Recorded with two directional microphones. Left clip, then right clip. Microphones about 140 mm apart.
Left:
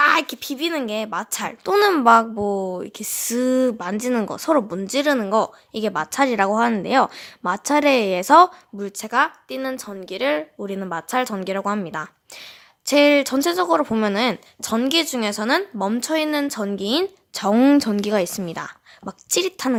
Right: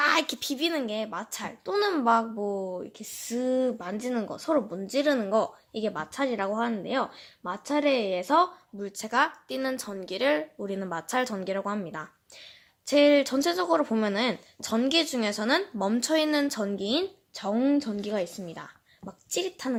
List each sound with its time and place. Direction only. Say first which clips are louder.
0.0 s speech: left 7 dB; 25° left (ahead or behind); by 8.4 s 60° left (ahead or behind)
8.8 s a woman's voice: left 6 dB; 30° left (ahead or behind)
17.3 s speech: left 10 dB; 55° left (ahead or behind)